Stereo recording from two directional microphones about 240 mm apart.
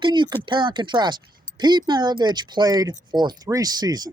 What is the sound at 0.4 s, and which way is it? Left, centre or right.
Speech, centre.